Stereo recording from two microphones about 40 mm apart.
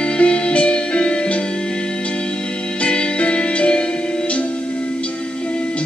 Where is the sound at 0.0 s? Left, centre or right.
Left.